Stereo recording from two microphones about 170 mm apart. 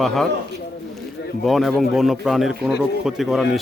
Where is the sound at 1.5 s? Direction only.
Centre (ahead or behind).